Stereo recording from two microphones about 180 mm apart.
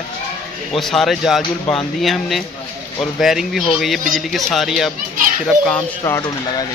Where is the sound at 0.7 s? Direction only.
Centre (ahead or behind).